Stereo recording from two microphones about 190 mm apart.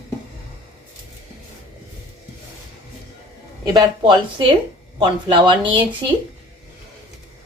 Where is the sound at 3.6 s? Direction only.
20° right (ahead or behind).